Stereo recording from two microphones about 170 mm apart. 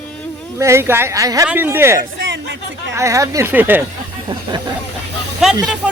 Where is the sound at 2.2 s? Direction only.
90° right.